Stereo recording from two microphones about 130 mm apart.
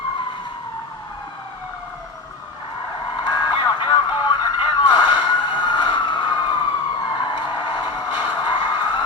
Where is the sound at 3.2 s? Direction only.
35° left (ahead or behind).